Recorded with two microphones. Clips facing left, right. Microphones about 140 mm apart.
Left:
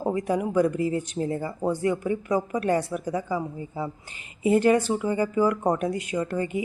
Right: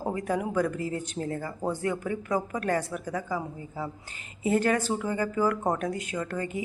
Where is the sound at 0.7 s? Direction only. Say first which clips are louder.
Left 6 dB; 45° right (ahead or behind).